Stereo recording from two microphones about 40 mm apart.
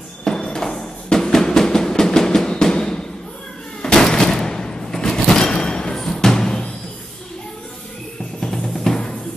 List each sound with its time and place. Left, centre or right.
0.2 s a sound: centre
5.9 s music: centre
8.4 s drum: centre